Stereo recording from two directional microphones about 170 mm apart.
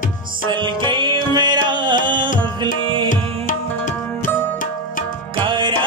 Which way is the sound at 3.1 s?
50° left (ahead or behind).